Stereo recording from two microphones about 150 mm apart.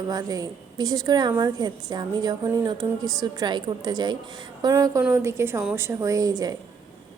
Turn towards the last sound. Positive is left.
turn(degrees=-25)  # may be behind; listen again after turning